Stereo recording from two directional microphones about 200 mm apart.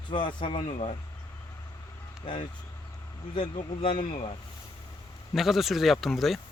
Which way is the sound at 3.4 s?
25° left (ahead or behind).